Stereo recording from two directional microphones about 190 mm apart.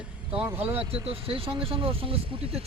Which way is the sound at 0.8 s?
30° right (ahead or behind).